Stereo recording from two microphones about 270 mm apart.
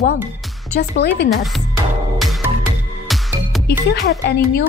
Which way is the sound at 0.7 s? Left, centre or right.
Left.